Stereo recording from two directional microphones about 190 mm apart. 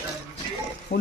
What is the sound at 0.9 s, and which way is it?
Speech, 45° left (ahead or behind).